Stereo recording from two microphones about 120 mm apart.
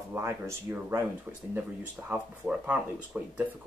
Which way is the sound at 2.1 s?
10° right (ahead or behind).